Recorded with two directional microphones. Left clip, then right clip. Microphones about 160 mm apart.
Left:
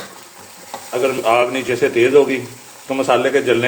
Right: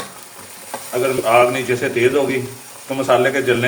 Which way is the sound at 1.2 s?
40° left (ahead or behind).